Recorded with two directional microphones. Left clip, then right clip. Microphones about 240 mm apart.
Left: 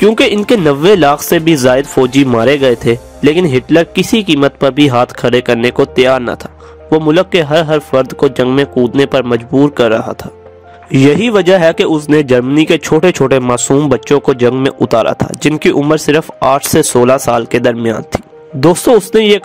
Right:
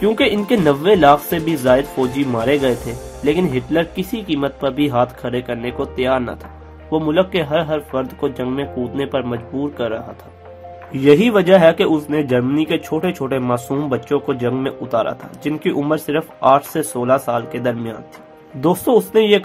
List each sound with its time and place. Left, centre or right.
0.0 s a man's voice: left